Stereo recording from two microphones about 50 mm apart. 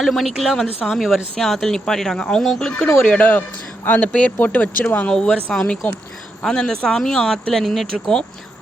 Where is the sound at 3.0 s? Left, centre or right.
Left.